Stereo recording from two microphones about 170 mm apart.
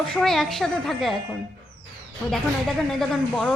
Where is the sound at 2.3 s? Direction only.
Centre (ahead or behind).